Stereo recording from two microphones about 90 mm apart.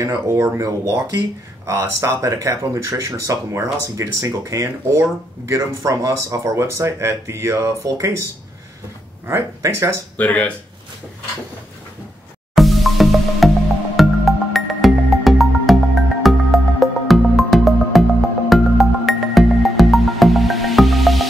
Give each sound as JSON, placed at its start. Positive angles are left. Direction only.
{"t": 0.0, "sound": "speech", "side_deg": -35}
{"t": 9.3, "sound": "speech", "side_deg": -30}
{"t": 10.1, "sound": "speech", "side_deg": 15}
{"t": 12.5, "sound": "music", "side_deg": 0}